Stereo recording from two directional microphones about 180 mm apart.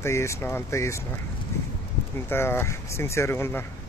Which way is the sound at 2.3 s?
15° left (ahead or behind).